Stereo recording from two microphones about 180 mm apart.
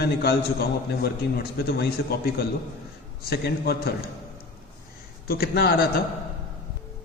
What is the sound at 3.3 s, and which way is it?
Speech, 60° left (ahead or behind).